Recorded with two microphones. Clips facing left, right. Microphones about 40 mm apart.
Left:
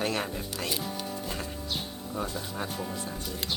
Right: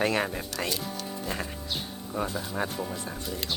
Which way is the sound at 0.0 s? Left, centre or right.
Right.